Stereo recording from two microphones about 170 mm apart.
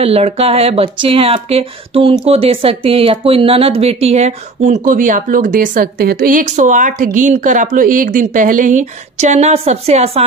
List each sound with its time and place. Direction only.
0.0 s speech: 35° right (ahead or behind)